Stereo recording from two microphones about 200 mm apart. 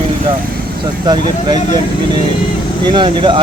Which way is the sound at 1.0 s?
20° right (ahead or behind).